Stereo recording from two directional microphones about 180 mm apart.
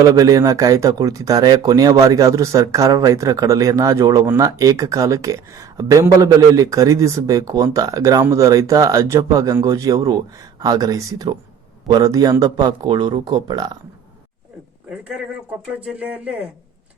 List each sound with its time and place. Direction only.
0.0 s speech: 20° right (ahead or behind)
14.8 s speech: 5° right (ahead or behind)